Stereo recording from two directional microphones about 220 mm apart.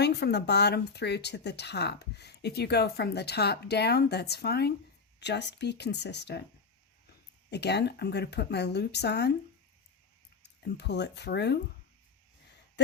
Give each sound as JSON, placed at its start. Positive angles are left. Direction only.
{"t": 0.0, "sound": "speech", "side_deg": 50}
{"t": 7.5, "sound": "speech", "side_deg": 50}
{"t": 10.4, "sound": "speech", "side_deg": 50}